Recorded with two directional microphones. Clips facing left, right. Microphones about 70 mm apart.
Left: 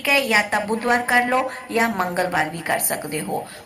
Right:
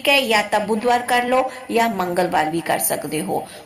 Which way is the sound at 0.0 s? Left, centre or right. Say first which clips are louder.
Right 2 dB; left.